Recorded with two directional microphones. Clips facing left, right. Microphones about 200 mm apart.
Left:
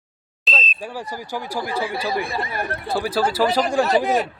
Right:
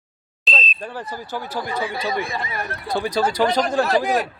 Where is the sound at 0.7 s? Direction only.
10° left (ahead or behind).